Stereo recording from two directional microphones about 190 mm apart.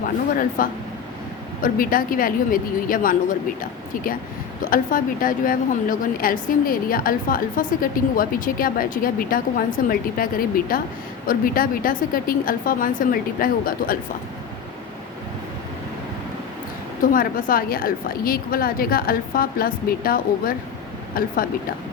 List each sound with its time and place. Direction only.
0.6 s a woman's voice: 45° left (ahead or behind)
17.0 s a woman's voice: 45° left (ahead or behind)